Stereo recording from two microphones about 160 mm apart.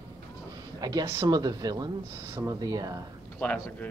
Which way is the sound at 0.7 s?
25° right (ahead or behind).